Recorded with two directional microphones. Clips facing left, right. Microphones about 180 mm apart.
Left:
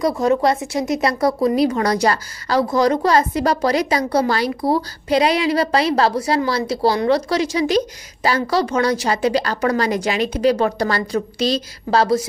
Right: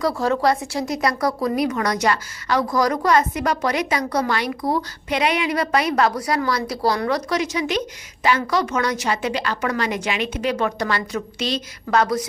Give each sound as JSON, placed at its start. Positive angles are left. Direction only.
{"t": 0.0, "sound": "a woman's voice", "side_deg": 20}